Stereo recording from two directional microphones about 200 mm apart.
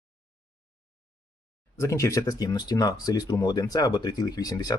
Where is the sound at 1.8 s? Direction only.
15° left (ahead or behind).